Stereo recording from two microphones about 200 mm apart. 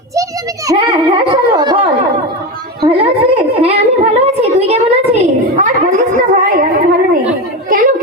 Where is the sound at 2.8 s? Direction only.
30° right (ahead or behind).